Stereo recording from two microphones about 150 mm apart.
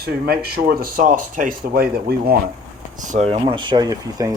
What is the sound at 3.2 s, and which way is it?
Speech, 40° right (ahead or behind).